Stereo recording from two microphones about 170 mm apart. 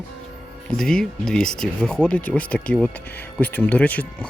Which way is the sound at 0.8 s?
5° left (ahead or behind).